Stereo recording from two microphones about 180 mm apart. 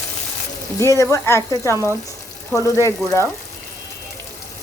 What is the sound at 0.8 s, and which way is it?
Speech, 15° left (ahead or behind).